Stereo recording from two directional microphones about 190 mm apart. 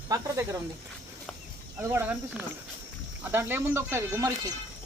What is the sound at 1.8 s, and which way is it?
Speech, 10° right (ahead or behind).